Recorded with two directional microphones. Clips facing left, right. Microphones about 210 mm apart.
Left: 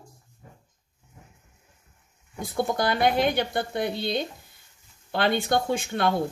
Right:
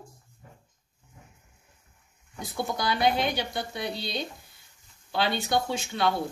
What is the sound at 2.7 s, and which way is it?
Speech, 55° left (ahead or behind).